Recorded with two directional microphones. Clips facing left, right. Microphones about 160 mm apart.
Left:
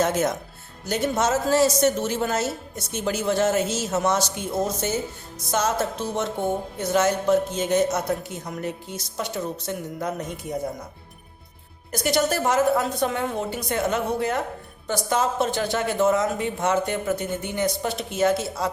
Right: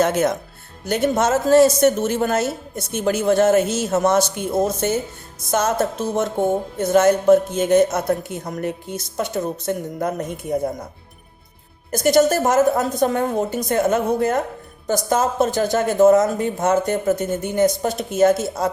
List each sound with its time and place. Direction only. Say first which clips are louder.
0.0 s a woman's voice: right 4 dB; 65° right (ahead or behind)
0.9 s a woman's voice: right 4 dB; 55° right (ahead or behind)
11.9 s speech: right 7 dB; 45° right (ahead or behind)